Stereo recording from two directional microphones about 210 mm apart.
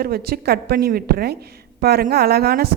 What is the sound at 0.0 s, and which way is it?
A woman's voice, 45° right (ahead or behind).